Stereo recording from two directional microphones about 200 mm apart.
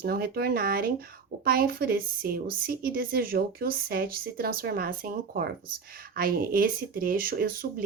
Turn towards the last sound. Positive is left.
turn(degrees=-45)  # may be behind; listen again after turning